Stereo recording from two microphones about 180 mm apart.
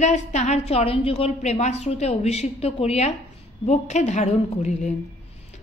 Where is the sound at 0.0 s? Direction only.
40° left (ahead or behind).